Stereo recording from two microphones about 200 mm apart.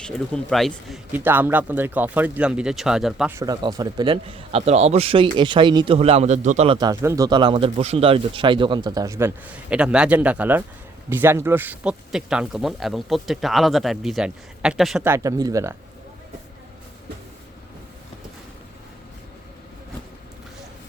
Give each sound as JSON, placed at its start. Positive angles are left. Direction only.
{"t": 0.5, "sound": "speech", "side_deg": 0}
{"t": 3.3, "sound": "speech", "side_deg": -20}
{"t": 6.7, "sound": "speech", "side_deg": -20}